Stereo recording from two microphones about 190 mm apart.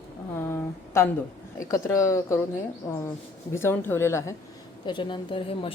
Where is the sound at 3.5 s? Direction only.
15° left (ahead or behind).